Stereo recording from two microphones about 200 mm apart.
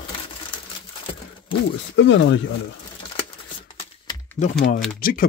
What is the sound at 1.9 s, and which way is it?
Speech, 65° left (ahead or behind).